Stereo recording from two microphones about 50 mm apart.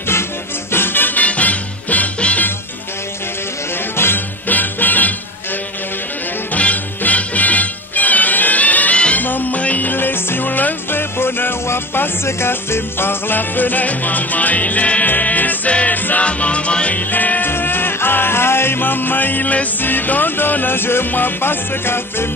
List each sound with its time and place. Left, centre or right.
0.7 s music: left
3.9 s music: left
4.5 s music: left
6.5 s music: left
12.3 s music: left
17.1 s music: left